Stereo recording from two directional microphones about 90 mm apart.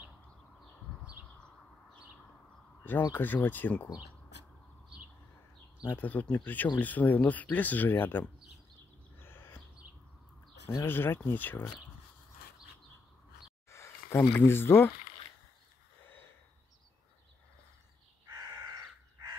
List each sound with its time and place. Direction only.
1.3 s bird: 10° left (ahead or behind)
2.8 s speech: 20° left (ahead or behind)
5.9 s speech: 20° left (ahead or behind)
9.2 s owl: 25° left (ahead or behind)
10.9 s speech: 25° left (ahead or behind)
13.7 s a sound: 30° left (ahead or behind)